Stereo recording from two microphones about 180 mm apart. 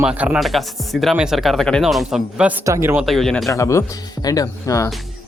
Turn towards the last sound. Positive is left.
turn(degrees=20)  # may be behind; listen again after turning